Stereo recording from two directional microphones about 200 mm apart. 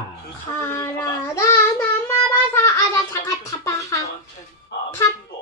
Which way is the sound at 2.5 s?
15° left (ahead or behind).